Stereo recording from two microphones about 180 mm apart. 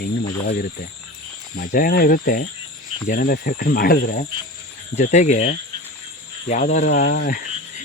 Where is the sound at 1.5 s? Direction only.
50° left (ahead or behind).